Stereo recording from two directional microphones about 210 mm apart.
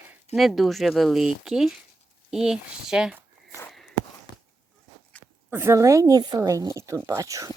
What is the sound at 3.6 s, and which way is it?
Walk, centre (ahead or behind).